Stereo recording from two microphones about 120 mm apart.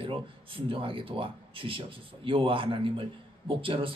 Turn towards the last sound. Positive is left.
turn(degrees=-50)  # may be behind; listen again after turning